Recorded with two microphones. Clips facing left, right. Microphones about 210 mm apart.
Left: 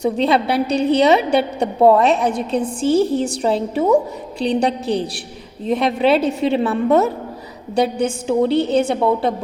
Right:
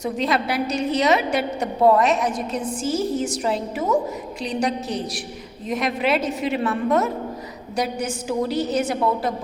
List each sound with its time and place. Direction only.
0.0 s a woman's voice: 30° left (ahead or behind)